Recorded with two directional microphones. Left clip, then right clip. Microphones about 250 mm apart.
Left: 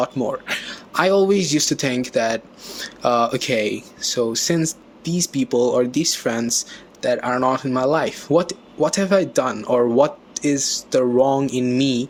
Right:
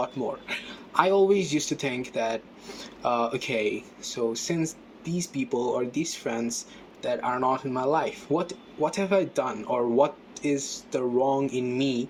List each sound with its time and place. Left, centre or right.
0.0 s speech: left